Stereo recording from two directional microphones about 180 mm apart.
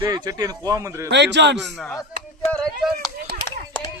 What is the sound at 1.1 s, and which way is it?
Speech, 75° right (ahead or behind).